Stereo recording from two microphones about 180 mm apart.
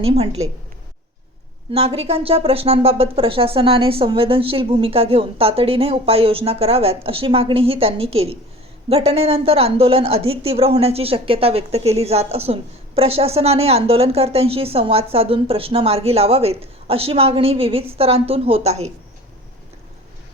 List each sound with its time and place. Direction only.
0.0 s a woman's voice: 35° right (ahead or behind)
1.7 s a woman's voice: 35° right (ahead or behind)